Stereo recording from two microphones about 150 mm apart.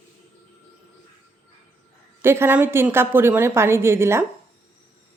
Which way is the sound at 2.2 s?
15° right (ahead or behind).